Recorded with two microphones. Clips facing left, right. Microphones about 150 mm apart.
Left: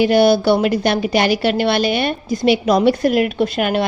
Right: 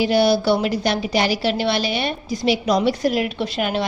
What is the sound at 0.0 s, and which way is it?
A woman's voice, 55° left (ahead or behind).